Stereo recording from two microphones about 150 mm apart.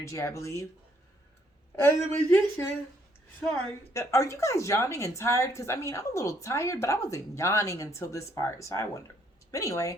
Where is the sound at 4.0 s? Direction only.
20° left (ahead or behind).